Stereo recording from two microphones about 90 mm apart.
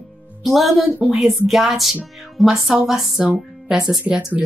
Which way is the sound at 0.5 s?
5° right (ahead or behind).